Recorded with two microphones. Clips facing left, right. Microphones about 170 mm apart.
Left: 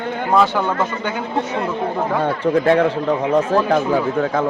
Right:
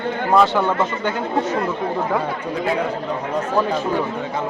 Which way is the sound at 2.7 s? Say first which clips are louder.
Left 7 dB; 85° left.